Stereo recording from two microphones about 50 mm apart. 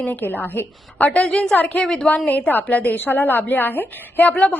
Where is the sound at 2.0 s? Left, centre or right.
Left.